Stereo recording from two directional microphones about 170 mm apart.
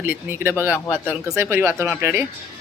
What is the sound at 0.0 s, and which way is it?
Speech, 15° right (ahead or behind).